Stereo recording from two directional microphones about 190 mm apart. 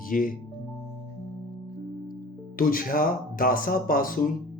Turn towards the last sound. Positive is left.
turn(degrees=45)  # may be behind; listen again after turning